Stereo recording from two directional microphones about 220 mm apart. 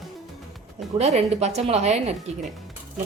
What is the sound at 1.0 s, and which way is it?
Speech, 30° right (ahead or behind).